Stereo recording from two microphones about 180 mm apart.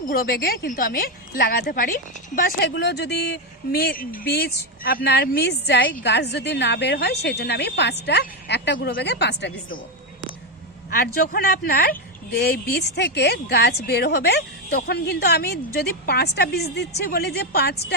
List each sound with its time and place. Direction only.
0.1 s a woman's voice: 55° left (ahead or behind)
2.6 s a woman's voice: 70° left (ahead or behind)
10.9 s speech: 55° left (ahead or behind)